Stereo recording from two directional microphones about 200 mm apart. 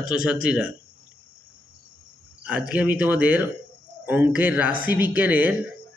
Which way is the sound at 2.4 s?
5° right (ahead or behind).